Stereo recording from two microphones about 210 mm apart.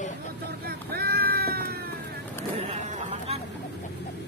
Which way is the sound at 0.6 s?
50° right (ahead or behind).